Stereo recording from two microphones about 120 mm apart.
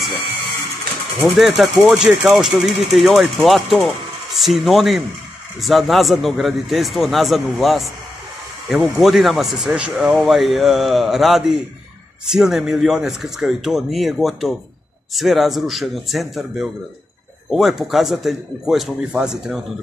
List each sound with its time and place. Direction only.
1.2 s speech: centre (ahead or behind)